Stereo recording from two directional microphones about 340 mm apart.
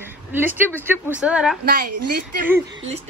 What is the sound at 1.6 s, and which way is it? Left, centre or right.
Speech, right.